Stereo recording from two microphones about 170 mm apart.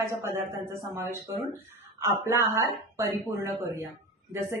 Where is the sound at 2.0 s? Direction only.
15° right (ahead or behind).